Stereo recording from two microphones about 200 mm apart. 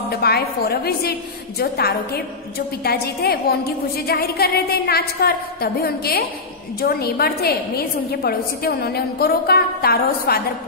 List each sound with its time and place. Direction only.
0.1 s a woman's voice: 50° left (ahead or behind)